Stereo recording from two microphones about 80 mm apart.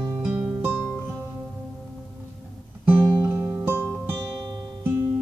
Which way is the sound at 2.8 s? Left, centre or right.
Right.